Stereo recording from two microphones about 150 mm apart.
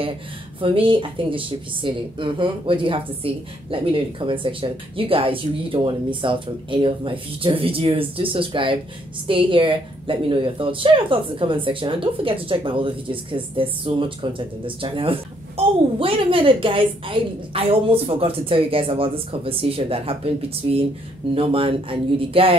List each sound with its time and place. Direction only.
0.6 s speech: 35° right (ahead or behind)